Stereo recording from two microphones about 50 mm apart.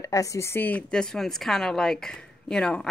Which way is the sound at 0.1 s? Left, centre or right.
Left.